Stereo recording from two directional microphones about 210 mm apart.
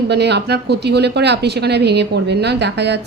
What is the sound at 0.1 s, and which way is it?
Speech, 55° right (ahead or behind).